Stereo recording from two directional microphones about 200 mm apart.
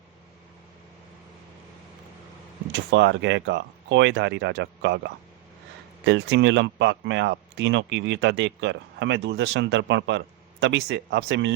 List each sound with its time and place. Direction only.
2.7 s speech: 60° right (ahead or behind)